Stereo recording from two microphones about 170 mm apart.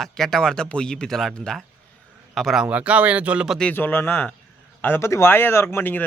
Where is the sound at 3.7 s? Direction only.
10° left (ahead or behind).